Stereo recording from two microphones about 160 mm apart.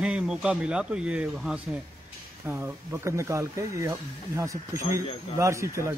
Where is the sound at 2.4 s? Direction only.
15° right (ahead or behind).